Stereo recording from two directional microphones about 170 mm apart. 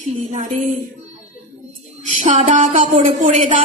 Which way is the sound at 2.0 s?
45° right (ahead or behind).